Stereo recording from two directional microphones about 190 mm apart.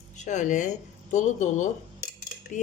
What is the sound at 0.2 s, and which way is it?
Speech, 40° left (ahead or behind).